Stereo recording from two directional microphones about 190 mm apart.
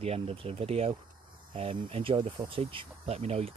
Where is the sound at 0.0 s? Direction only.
30° right (ahead or behind).